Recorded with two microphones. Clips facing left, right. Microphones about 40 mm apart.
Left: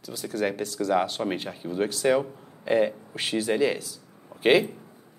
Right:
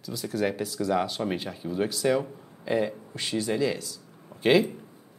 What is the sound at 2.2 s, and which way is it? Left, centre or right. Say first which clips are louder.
Speech: left 3 dB; centre.